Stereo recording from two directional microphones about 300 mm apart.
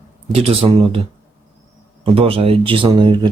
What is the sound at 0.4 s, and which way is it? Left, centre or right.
Speech, centre.